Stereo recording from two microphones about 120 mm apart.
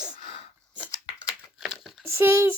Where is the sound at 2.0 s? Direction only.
20° right (ahead or behind).